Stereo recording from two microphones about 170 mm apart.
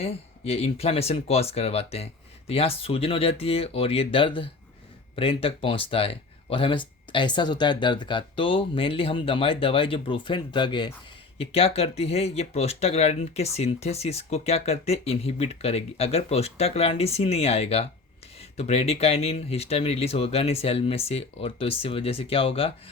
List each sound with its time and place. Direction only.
0.0 s speech: 35° left (ahead or behind)